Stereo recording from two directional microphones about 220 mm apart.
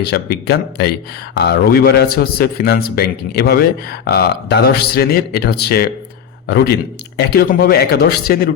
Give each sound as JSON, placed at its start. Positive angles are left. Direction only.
{"t": 0.0, "sound": "a man's voice", "side_deg": 45}